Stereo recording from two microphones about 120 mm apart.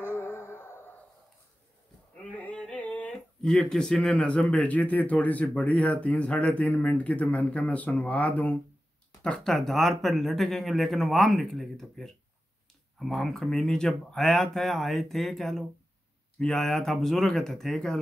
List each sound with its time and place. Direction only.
0.2 s music: 20° left (ahead or behind)
0.6 s a sound: 20° left (ahead or behind)
2.3 s speech: 10° left (ahead or behind)